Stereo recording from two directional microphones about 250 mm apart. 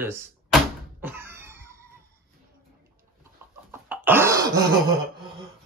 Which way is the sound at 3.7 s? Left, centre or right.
Centre.